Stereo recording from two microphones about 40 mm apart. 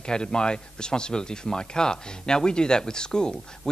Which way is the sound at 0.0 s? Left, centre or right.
Left.